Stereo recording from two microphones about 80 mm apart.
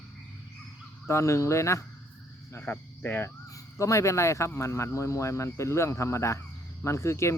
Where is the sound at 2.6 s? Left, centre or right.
Left.